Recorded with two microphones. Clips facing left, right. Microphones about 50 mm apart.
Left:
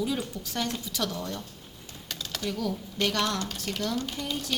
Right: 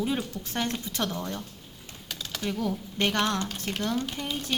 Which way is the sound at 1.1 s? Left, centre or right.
Right.